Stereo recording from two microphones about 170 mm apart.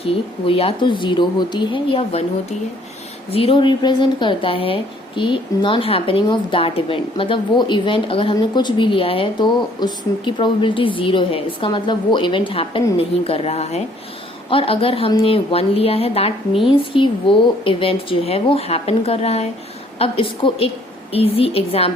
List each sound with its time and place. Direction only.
0.0 s a woman's voice: 35° left (ahead or behind)